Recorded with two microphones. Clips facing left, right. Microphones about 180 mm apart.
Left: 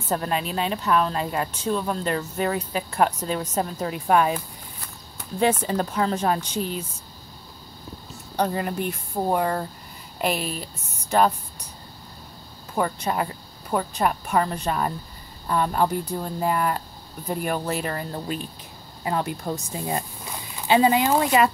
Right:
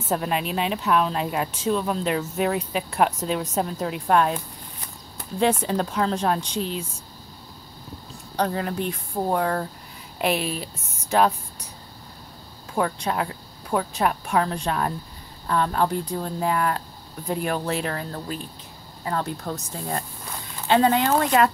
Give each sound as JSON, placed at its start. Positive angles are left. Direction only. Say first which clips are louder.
{"t": 0.1, "sound": "speech", "louder": "right 1 dB", "side_deg": 0}
{"t": 8.4, "sound": "speech", "louder": "even", "side_deg": 5}
{"t": 12.7, "sound": "speech", "louder": "even", "side_deg": 0}
{"t": 19.0, "sound": "speech", "louder": "left 1 dB", "side_deg": 15}